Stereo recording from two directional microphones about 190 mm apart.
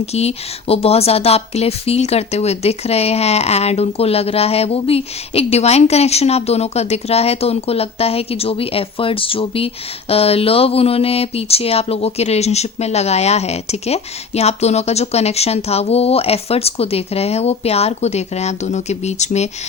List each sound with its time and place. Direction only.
0.0 s speech: 35° left (ahead or behind)